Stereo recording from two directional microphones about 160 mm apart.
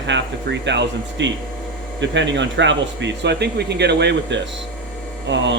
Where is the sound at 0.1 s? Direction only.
90° right.